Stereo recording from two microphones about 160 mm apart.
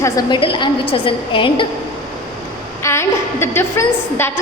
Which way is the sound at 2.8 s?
15° left (ahead or behind).